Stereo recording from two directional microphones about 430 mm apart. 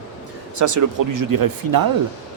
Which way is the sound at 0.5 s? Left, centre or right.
Right.